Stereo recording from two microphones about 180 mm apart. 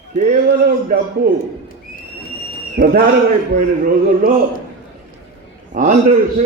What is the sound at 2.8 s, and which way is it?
Speech, 55° right (ahead or behind).